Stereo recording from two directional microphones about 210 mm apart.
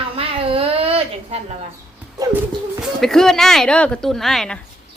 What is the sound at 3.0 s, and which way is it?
Speech, centre (ahead or behind).